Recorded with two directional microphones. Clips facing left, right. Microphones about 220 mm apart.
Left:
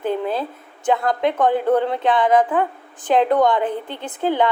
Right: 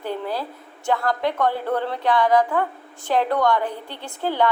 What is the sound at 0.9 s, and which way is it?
A woman's voice, 20° left (ahead or behind).